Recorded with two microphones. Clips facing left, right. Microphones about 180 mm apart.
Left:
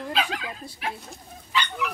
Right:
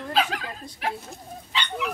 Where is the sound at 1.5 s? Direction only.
25° right (ahead or behind).